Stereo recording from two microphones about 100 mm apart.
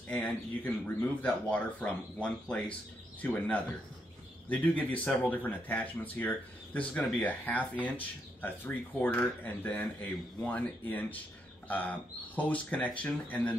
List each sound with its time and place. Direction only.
0.1 s speech: 10° left (ahead or behind)